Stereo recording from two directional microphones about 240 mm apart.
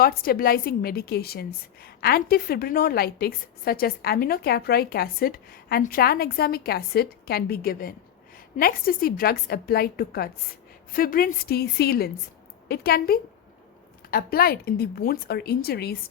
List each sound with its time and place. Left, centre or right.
0.0 s a woman's voice: left